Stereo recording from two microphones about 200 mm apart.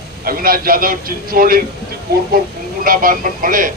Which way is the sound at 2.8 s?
45° right (ahead or behind).